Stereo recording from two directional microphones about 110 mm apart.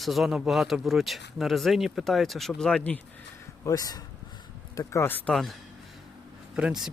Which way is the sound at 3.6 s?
30° left (ahead or behind).